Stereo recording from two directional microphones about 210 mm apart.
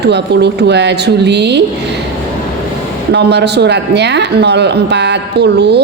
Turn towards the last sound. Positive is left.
turn(degrees=-55)  # may be behind; listen again after turning